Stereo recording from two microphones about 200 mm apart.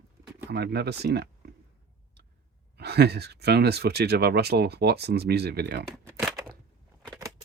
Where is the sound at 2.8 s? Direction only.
55° right (ahead or behind).